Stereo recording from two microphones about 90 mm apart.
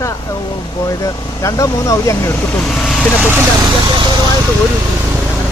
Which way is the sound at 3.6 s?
50° right (ahead or behind).